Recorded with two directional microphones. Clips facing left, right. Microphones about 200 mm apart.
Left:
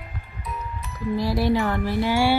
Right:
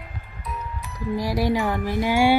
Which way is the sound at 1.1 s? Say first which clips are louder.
Left 1 dB; 15° right (ahead or behind).